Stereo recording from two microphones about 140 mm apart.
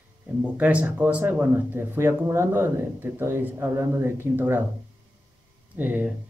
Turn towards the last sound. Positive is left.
turn(degrees=-15)  # may be behind; listen again after turning